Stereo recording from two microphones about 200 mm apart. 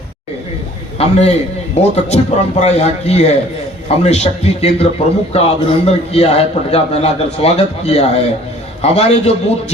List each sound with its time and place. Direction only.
0.9 s a man's voice: 30° left (ahead or behind)